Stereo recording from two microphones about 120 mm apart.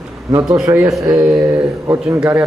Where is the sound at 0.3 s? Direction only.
35° right (ahead or behind).